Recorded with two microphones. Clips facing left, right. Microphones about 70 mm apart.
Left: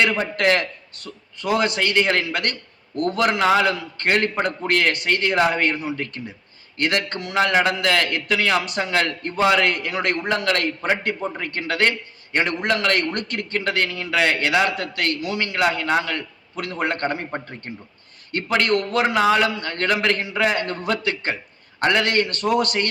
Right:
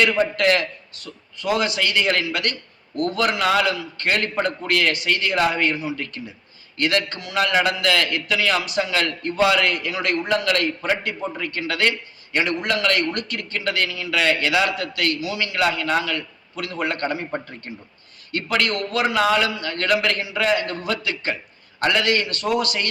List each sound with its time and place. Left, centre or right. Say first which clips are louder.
0.3 s a man's voice: even; left
6.7 s a man's voice: right 1 dB; left
18.3 s a man's voice: left 2 dB; left
20.3 s a man's voice: right 3 dB; left
20.6 s a man's voice: left 1 dB; left